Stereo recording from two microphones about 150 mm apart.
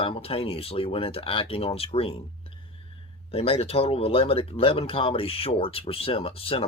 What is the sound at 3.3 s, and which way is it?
Speech, 40° left (ahead or behind).